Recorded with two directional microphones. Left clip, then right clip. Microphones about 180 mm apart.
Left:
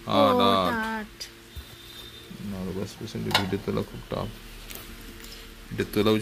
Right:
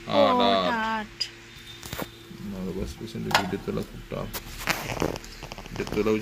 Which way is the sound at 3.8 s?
35° left (ahead or behind).